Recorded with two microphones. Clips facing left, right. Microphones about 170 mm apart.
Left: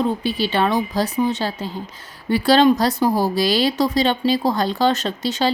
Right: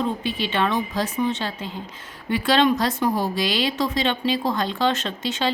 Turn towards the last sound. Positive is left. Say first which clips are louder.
# left 4 dB
turn(degrees=40)  # may be behind; listen again after turning